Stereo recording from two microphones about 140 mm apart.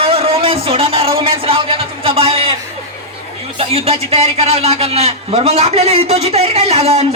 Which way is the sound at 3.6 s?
45° right (ahead or behind).